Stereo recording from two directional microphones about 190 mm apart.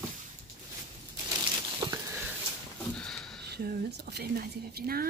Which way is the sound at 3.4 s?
55° right (ahead or behind).